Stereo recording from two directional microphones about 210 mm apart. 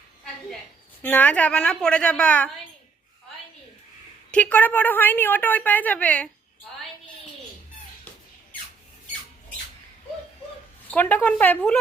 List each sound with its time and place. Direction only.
1.0 s a woman's voice: 10° left (ahead or behind)
4.3 s a woman's voice: 5° left (ahead or behind)
10.9 s a woman's voice: 10° left (ahead or behind)